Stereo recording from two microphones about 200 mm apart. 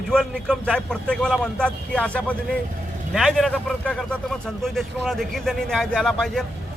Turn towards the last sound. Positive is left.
turn(degrees=0)  # may be behind; listen again after turning